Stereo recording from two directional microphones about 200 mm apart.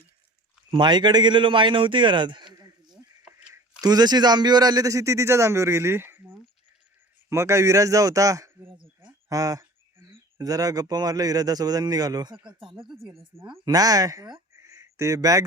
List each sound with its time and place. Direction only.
0.7 s a man's voice: 20° right (ahead or behind)
13.1 s speech: centre (ahead or behind)
13.5 s a man's voice: 20° right (ahead or behind)
14.5 s a sound: 15° right (ahead or behind)